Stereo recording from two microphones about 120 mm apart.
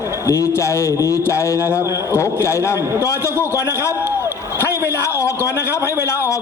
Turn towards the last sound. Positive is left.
turn(degrees=25)  # may be behind; listen again after turning